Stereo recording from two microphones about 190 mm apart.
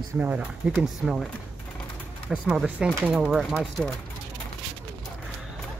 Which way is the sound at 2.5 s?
5° right (ahead or behind).